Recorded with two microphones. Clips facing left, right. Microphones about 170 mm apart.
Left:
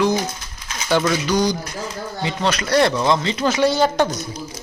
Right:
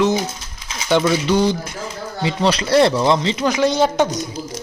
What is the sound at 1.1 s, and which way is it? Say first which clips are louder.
Speech: right 3 dB; 30° right (ahead or behind).